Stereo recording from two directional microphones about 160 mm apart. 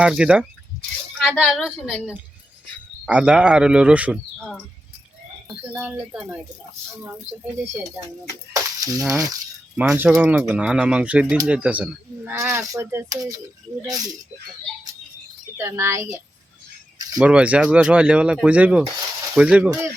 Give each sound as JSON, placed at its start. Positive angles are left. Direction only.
{"t": 0.0, "sound": "speech", "side_deg": -5}
{"t": 5.7, "sound": "speech", "side_deg": -10}
{"t": 8.5, "sound": "a sound", "side_deg": -20}
{"t": 9.8, "sound": "speech", "side_deg": -5}
{"t": 15.5, "sound": "speech", "side_deg": -20}
{"t": 17.2, "sound": "speech", "side_deg": -5}